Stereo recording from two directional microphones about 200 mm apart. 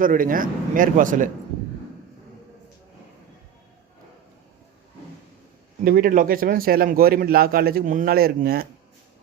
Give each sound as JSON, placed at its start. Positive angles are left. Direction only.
{"t": 0.0, "sound": "a man's voice", "side_deg": -45}
{"t": 5.8, "sound": "a man's voice", "side_deg": -45}